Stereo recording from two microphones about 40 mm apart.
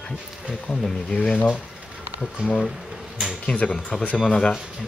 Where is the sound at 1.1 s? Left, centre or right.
Left.